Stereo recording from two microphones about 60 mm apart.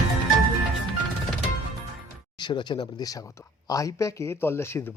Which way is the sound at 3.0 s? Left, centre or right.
Left.